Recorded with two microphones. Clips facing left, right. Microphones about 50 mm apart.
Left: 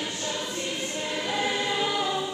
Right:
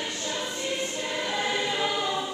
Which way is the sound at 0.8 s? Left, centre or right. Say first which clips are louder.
Even; centre.